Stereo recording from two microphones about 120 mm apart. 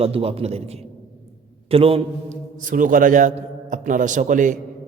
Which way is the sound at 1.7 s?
50° right (ahead or behind).